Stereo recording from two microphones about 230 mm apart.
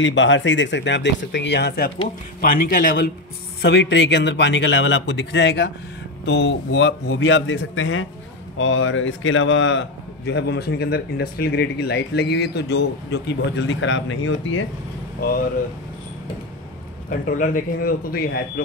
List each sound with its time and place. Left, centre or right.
0.0 s a man's voice: left
3.6 s a man's voice: left
17.1 s speech: left